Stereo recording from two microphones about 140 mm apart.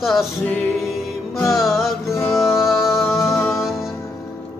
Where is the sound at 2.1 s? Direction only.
20° left (ahead or behind).